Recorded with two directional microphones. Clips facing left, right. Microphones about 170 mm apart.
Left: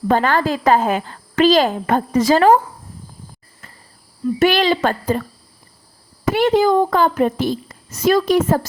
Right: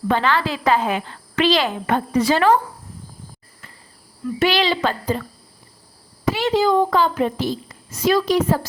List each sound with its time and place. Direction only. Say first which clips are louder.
0.1 s a woman's voice: left 3 dB; 45° left (ahead or behind)
4.4 s a woman's voice: left 3 dB; 50° left (ahead or behind)
6.3 s a woman's voice: left 4 dB; 50° left (ahead or behind)